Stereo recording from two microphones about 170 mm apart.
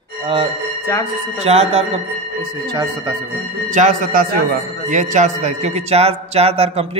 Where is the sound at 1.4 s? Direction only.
40° right (ahead or behind).